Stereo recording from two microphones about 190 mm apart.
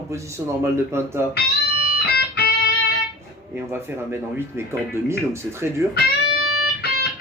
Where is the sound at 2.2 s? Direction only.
60° left (ahead or behind).